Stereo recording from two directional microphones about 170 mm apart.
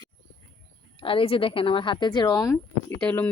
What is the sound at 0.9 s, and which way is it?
A woman's voice, 30° left (ahead or behind).